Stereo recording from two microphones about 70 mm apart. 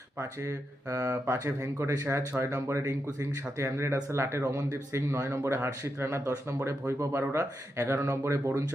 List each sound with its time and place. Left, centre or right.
0.2 s speech: right
1.1 s speech: right